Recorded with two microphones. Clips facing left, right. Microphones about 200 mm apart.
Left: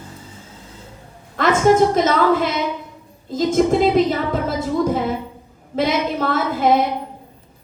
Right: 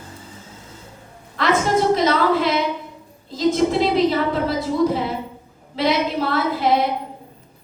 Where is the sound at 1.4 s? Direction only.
50° left (ahead or behind).